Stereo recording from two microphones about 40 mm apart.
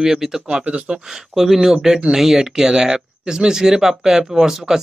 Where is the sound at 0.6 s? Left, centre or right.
Right.